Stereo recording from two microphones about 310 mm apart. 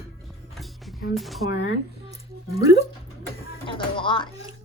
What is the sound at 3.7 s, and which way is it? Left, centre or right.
Music, centre.